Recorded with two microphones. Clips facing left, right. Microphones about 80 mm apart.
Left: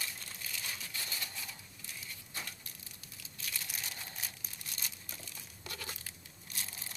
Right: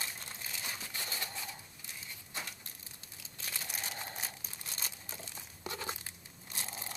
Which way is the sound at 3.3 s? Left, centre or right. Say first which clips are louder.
Right 2 dB; right.